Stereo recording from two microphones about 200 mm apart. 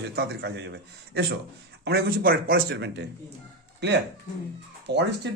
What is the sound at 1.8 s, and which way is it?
Speech, 50° right (ahead or behind).